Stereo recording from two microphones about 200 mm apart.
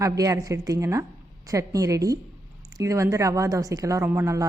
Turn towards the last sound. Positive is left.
turn(degrees=-15)  # may be behind; listen again after turning